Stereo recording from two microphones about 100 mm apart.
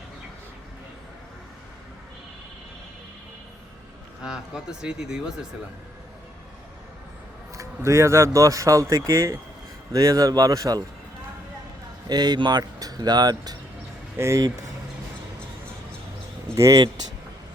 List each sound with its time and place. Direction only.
4.2 s speech: 5° right (ahead or behind)
7.5 s speech: 30° right (ahead or behind)
12.0 s speech: 45° right (ahead or behind)
16.6 s speech: 30° right (ahead or behind)